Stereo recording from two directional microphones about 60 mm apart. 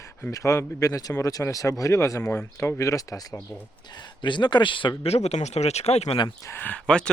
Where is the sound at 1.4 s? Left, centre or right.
Left.